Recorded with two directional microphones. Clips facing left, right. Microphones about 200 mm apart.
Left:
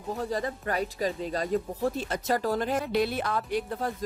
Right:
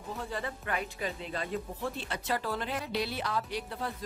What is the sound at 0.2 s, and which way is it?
Speech, 40° left (ahead or behind).